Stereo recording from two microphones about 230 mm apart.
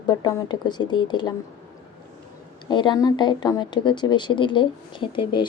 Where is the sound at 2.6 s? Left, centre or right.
Centre.